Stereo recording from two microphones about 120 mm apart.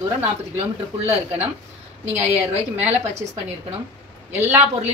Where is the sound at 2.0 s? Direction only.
70° right (ahead or behind).